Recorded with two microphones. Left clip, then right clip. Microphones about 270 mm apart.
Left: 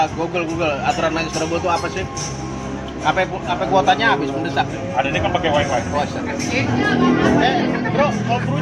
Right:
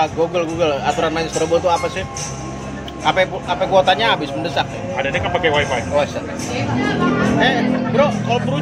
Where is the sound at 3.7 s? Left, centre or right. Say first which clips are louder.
Right 1 dB; right.